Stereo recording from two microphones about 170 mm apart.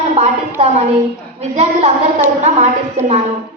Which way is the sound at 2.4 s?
45° right (ahead or behind).